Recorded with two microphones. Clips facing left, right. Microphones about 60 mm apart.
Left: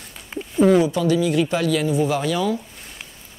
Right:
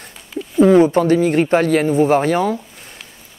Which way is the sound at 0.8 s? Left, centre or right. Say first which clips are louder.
Right 6 dB; right.